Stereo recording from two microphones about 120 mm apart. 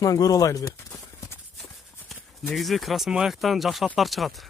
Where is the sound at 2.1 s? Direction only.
Centre (ahead or behind).